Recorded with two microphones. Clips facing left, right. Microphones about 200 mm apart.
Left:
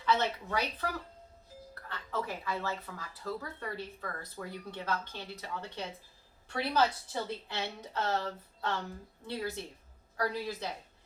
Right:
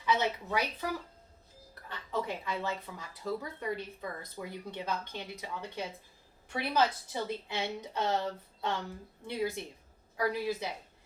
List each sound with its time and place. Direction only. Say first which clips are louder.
0.0 s speech: even; 15° right (ahead or behind)
1.9 s speech: right 2 dB; 15° right (ahead or behind)